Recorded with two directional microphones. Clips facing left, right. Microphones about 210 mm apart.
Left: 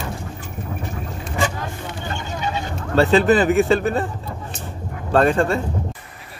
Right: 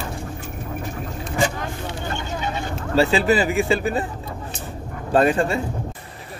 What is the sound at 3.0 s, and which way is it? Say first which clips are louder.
Speech: left 3 dB; 5° right (ahead or behind).